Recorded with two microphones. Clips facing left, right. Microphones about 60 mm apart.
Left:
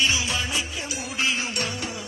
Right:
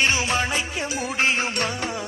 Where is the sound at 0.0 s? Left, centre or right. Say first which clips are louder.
Right 3 dB; right.